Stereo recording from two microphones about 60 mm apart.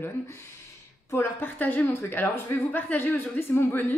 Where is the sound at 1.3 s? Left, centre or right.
Left.